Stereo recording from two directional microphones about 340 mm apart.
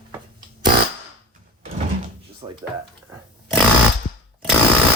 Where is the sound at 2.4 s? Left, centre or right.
Centre.